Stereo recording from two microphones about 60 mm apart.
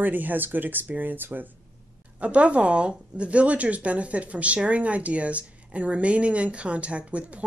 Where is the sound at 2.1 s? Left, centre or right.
Right.